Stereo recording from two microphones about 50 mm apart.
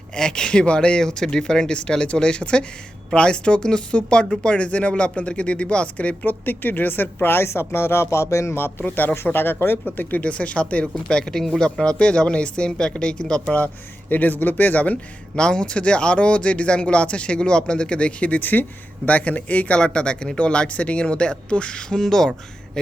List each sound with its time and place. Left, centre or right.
0.2 s speech: centre
6.2 s a woman's voice: left
9.2 s a woman's voice: left
9.8 s speech: left
11.2 s speech: centre
11.8 s speech: centre
14.1 s speech: left
15.4 s speech: centre